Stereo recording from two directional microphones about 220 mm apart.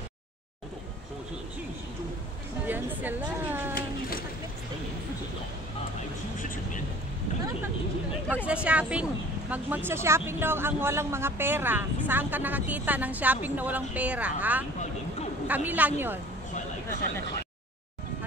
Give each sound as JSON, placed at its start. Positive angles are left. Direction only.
{"t": 2.6, "sound": "speech", "side_deg": -10}
{"t": 8.5, "sound": "speech", "side_deg": -5}